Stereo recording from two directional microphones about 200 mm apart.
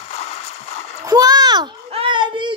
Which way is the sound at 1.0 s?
20° right (ahead or behind).